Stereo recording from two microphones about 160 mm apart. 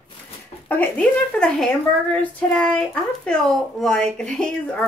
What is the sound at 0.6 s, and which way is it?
A woman's voice, 10° left (ahead or behind).